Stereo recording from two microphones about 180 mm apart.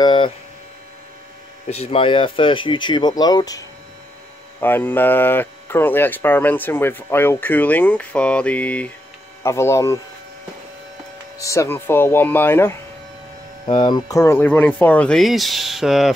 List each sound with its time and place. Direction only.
0.0 s speech: 25° left (ahead or behind)
1.7 s speech: 35° left (ahead or behind); by 9.9 s 15° left (ahead or behind)
11.3 s speech: 15° left (ahead or behind)
13.7 s speech: 25° left (ahead or behind); by 16.2 s centre (ahead or behind)